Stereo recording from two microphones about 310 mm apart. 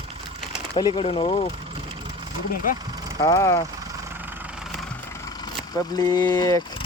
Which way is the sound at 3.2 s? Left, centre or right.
Centre.